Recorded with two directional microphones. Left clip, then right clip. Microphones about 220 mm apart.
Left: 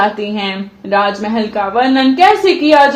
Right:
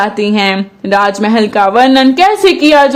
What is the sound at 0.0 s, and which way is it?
Speech, 50° right (ahead or behind).